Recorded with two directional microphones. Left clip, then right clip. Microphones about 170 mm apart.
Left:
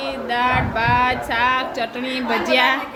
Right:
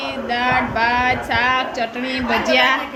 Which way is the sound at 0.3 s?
10° left (ahead or behind).